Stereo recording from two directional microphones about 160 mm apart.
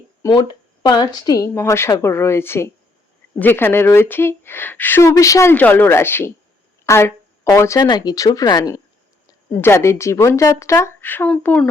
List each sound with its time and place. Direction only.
0.2 s speech: 25° left (ahead or behind); by 11.7 s 5° left (ahead or behind)